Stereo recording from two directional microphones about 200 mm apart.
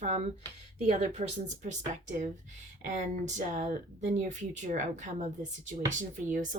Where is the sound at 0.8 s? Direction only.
35° right (ahead or behind).